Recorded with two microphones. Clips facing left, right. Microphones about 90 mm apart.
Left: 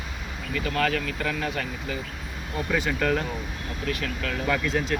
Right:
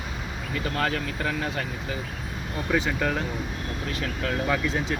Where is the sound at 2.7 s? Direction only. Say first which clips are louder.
Even; 20° right (ahead or behind).